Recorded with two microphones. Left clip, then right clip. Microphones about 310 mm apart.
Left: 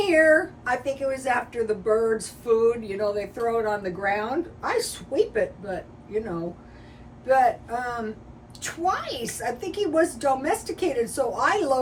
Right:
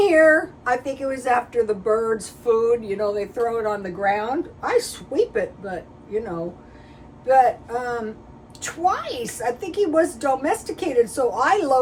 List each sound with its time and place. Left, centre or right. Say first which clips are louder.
0.0 s speech: right 3 dB; centre
7.3 s speech: right 4 dB; centre